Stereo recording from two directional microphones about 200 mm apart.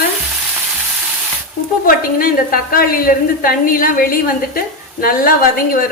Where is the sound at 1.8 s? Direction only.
45° left (ahead or behind).